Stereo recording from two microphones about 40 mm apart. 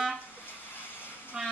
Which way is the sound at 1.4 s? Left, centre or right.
Centre.